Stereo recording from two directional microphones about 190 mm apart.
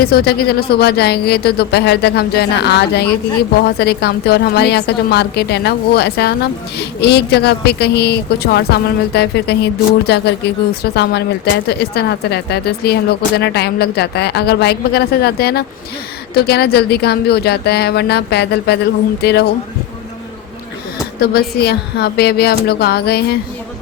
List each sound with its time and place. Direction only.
0.0 s a woman's voice: 55° left (ahead or behind)
21.2 s a woman's voice: 55° left (ahead or behind)